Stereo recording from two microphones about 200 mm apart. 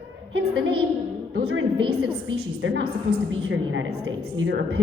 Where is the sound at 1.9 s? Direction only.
55° right (ahead or behind).